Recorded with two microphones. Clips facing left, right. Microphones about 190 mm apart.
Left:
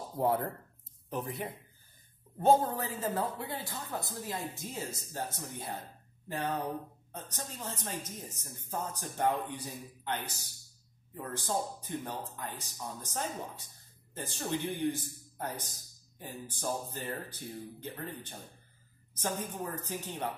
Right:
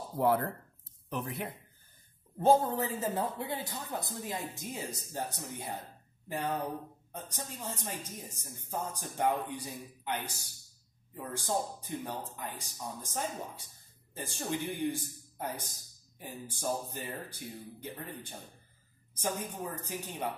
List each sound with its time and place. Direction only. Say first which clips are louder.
0.2 s speech: right 2 dB; 80° right
2.5 s a woman's voice: right 1 dB; 25° right (ahead or behind)
14.8 s a woman's voice: left 1 dB; 10° right (ahead or behind)